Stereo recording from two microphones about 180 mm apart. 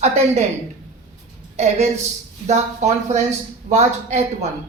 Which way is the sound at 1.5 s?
40° right (ahead or behind).